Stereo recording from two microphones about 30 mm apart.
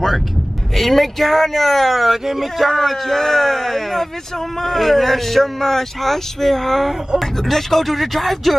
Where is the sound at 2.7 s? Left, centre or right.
Centre.